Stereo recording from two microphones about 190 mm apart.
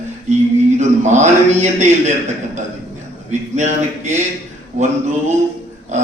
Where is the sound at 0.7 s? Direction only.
40° right (ahead or behind).